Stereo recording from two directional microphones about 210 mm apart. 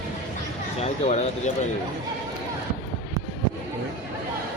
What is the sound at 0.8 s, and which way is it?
Speech, 30° left (ahead or behind).